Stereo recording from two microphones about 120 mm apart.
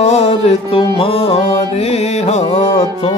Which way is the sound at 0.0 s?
65° left (ahead or behind).